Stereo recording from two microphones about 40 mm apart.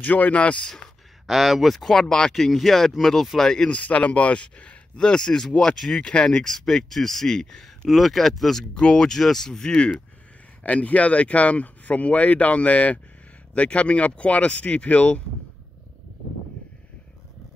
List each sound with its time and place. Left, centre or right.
0.0 s speech: left
1.2 s speech: centre
1.9 s speech: centre
3.6 s speech: left
6.4 s speech: centre
8.7 s speech: left
10.6 s speech: left